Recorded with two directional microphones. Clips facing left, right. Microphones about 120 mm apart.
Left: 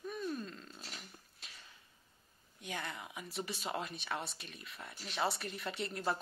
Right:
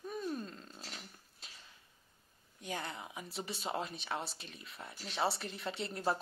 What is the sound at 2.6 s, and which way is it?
Speech, 30° right (ahead or behind).